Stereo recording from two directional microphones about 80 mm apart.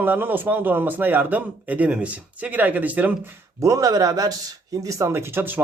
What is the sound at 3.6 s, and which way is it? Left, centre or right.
Speech, right.